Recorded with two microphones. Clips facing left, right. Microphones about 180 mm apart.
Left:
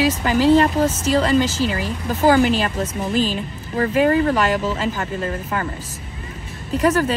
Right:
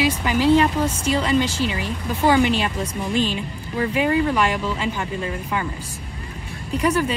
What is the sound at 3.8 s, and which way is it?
Speech, 45° left (ahead or behind).